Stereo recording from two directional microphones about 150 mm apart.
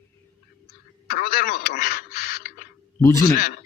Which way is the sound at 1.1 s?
70° left (ahead or behind).